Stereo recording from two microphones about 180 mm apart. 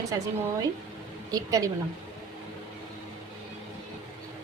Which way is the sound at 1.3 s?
20° right (ahead or behind).